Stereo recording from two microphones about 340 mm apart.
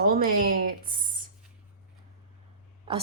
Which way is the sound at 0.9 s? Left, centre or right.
Right.